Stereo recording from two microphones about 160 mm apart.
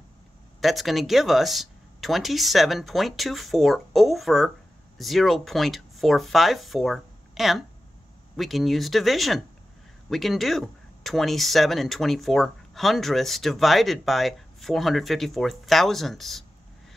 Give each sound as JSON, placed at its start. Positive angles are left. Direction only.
{"t": 0.6, "sound": "speech", "side_deg": 0}